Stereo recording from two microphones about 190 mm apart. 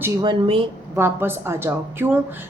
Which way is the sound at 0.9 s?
10° right (ahead or behind).